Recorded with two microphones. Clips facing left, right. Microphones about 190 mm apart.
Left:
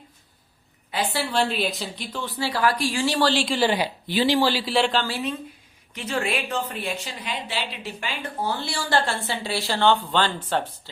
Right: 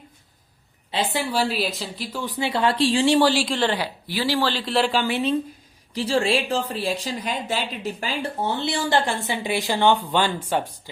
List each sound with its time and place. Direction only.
0.9 s a woman's voice: 25° right (ahead or behind)
1.2 s speech: 10° right (ahead or behind)
2.2 s speech: 15° right (ahead or behind)
3.2 s speech: 10° right (ahead or behind)
3.4 s speech: 5° left (ahead or behind)
4.0 s speech: 20° left (ahead or behind); by 5.0 s 5° right (ahead or behind)
5.0 s speech: 20° right (ahead or behind)
5.9 s a woman's voice: 30° right (ahead or behind)
8.4 s speech: 20° right (ahead or behind)